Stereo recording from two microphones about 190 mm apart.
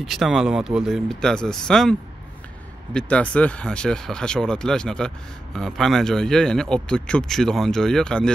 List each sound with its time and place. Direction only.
0.0 s speech: centre (ahead or behind)